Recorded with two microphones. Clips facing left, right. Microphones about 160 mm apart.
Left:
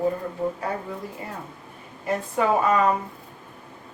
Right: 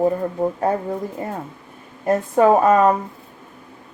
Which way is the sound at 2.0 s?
45° right (ahead or behind).